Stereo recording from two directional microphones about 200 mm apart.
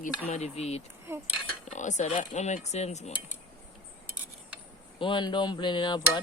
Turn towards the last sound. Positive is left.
turn(degrees=20)  # may be behind; listen again after turning